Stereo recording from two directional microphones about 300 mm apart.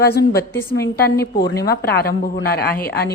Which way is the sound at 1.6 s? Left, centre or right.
Left.